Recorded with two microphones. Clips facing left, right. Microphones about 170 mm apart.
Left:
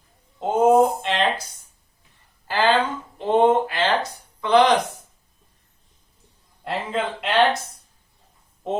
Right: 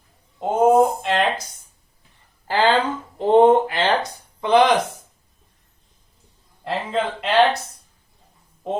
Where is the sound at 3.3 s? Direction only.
30° right (ahead or behind).